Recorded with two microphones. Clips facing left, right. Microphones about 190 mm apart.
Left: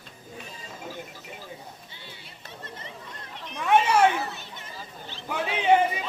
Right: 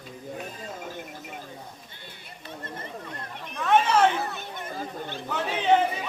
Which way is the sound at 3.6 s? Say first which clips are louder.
Even; 10° left (ahead or behind).